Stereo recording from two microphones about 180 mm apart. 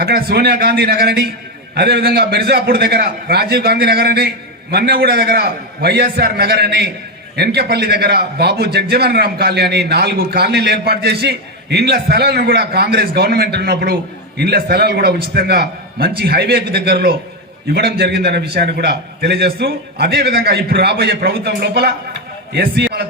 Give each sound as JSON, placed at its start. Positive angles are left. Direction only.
{"t": 0.0, "sound": "a man's voice", "side_deg": -60}